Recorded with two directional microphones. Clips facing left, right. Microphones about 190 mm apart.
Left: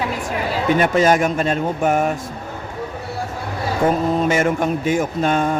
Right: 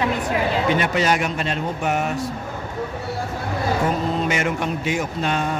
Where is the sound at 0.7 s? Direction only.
45° left (ahead or behind).